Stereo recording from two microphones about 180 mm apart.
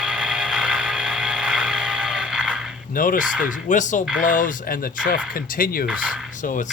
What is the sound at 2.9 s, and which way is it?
Speech, 50° left (ahead or behind).